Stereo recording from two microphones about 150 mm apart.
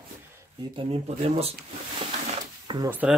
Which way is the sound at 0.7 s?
40° right (ahead or behind).